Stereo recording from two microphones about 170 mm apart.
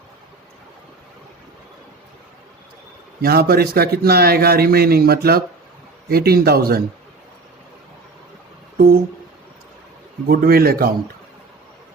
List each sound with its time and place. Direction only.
3.2 s a man's voice: 65° right (ahead or behind)
10.2 s a man's voice: 60° right (ahead or behind)